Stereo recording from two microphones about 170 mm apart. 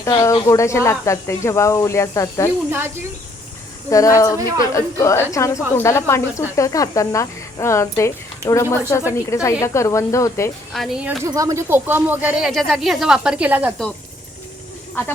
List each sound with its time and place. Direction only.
0.0 s speech: 20° left (ahead or behind)
2.6 s speech: 15° right (ahead or behind)
3.8 s speech: 20° left (ahead or behind)
4.4 s a woman's voice: 25° right (ahead or behind)
4.7 s speech: 20° left (ahead or behind)
8.4 s speech: 15° right (ahead or behind)
9.3 s speech: 20° left (ahead or behind)
10.7 s speech: centre (ahead or behind)
11.2 s speech: 20° right (ahead or behind)